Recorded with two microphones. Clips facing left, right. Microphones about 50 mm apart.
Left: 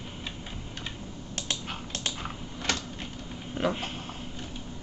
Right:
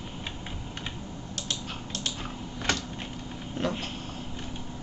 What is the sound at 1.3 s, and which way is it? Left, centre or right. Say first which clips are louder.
Typing: left 1 dB; left.